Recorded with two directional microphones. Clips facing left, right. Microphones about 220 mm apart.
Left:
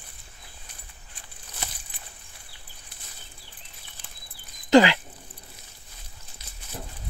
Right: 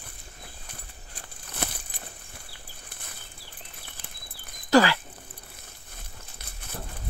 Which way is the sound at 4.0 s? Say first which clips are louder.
Right 1 dB; 55° right (ahead or behind).